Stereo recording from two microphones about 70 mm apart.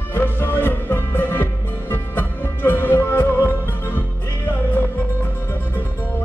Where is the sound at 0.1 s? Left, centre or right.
Left.